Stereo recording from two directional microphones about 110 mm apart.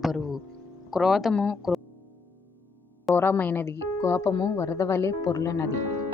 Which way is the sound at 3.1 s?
20° left (ahead or behind).